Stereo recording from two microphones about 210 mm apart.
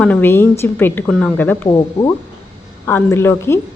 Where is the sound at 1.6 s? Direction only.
20° left (ahead or behind).